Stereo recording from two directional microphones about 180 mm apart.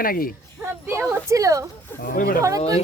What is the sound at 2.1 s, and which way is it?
Speech, 55° left (ahead or behind).